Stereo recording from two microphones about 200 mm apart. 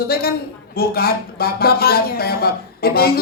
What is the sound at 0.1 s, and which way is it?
Speech, 50° left (ahead or behind).